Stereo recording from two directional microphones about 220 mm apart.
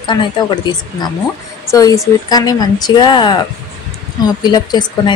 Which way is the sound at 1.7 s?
15° left (ahead or behind).